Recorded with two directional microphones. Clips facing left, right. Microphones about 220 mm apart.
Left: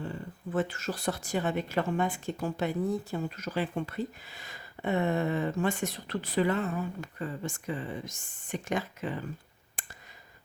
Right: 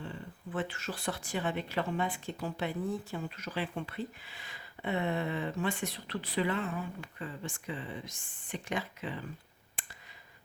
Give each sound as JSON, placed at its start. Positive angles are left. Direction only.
{"t": 0.0, "sound": "speech", "side_deg": 40}
{"t": 9.8, "sound": "clicking", "side_deg": 45}